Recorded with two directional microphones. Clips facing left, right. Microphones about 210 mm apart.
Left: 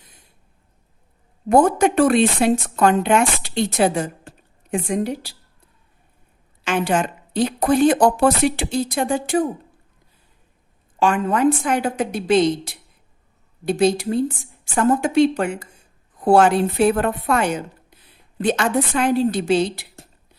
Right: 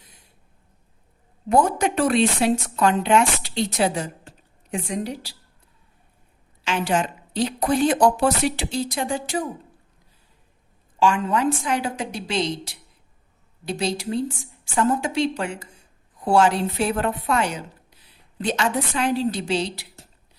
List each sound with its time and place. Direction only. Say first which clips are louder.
1.5 s speech: left 5 dB; 50° left (ahead or behind)
6.7 s speech: left 3 dB; 55° left (ahead or behind)
11.0 s speech: left 3 dB; 55° left (ahead or behind)